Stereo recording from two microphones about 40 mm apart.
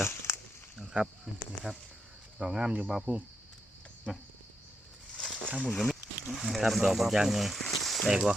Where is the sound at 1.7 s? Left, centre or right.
Centre.